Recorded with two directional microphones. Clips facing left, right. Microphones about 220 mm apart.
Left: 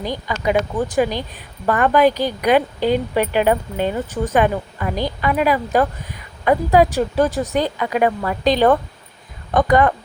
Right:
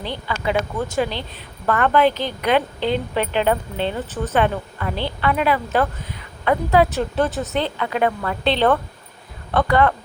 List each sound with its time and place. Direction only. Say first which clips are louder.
0.0 s a woman's voice: left 3 dB; 10° left (ahead or behind)